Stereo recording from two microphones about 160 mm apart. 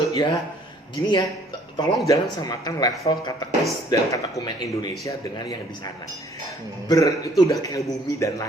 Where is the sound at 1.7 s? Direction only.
30° left (ahead or behind).